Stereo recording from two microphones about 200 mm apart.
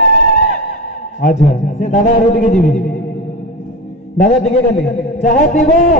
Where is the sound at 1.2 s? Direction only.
35° left (ahead or behind).